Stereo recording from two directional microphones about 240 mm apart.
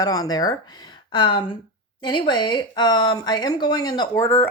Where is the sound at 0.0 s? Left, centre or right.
Centre.